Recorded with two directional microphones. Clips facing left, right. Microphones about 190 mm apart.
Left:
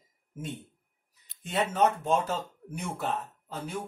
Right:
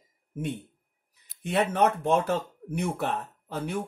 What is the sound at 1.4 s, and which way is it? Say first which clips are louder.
Speech: right 2 dB; 60° right (ahead or behind).